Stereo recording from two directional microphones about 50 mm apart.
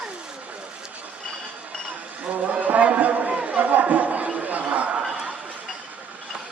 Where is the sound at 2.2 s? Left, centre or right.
Right.